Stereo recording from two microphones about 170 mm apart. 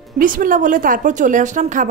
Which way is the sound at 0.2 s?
55° right (ahead or behind).